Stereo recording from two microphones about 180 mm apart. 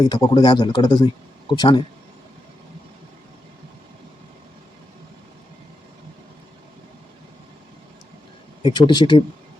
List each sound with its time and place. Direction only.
0.0 s a man's voice: 25° left (ahead or behind)
8.6 s a man's voice: 25° left (ahead or behind)